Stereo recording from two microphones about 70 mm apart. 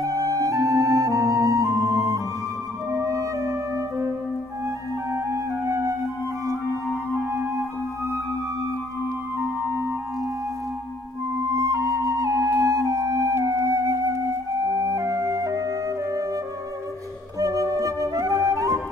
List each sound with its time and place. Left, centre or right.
0.0 s music: right
5.7 s music: right
7.2 s music: right
9.4 s music: right
11.5 s music: right
17.4 s flute: right